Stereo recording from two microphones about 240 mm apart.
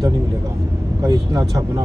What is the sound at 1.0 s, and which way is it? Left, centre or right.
Speech, centre.